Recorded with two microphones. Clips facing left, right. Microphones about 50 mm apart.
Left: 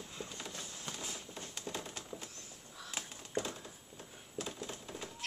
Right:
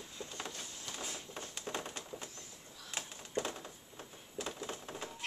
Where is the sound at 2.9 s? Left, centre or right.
Centre.